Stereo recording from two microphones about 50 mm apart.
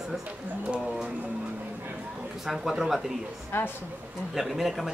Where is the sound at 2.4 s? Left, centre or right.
Centre.